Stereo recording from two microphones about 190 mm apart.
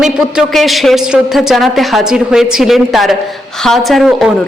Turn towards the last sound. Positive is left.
turn(degrees=0)  # may be behind; listen again after turning